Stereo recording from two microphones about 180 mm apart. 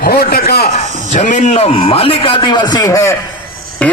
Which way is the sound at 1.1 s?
40° left (ahead or behind).